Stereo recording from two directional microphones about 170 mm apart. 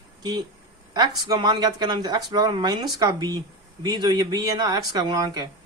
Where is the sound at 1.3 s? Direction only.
25° right (ahead or behind).